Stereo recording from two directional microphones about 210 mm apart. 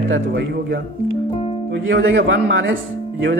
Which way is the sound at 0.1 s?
55° right (ahead or behind).